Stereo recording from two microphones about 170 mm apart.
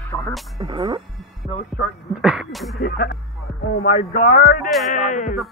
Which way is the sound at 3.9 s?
40° left (ahead or behind).